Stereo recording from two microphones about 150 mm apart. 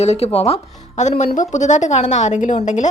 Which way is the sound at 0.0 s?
45° left (ahead or behind).